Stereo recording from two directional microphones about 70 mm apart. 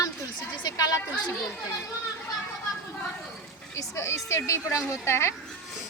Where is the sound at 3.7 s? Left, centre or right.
Left.